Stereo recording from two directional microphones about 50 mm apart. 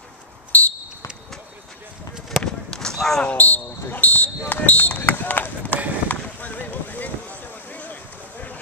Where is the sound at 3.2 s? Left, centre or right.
Left.